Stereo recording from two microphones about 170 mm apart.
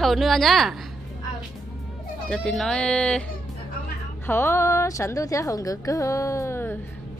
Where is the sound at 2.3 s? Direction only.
5° left (ahead or behind).